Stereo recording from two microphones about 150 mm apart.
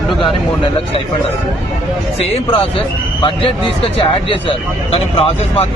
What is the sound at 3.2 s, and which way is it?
A man's voice, 35° left (ahead or behind).